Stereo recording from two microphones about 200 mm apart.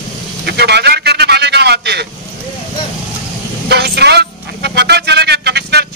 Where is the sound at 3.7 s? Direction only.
55° right (ahead or behind).